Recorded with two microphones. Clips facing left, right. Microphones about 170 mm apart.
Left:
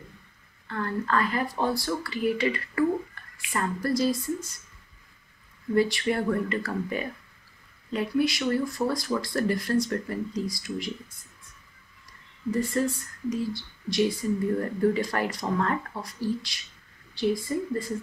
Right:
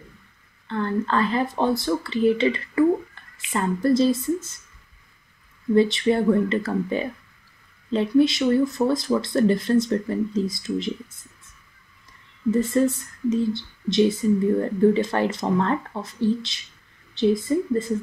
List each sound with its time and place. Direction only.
0.7 s speech: 25° right (ahead or behind)
5.8 s speech: 25° right (ahead or behind)
12.4 s speech: 25° right (ahead or behind)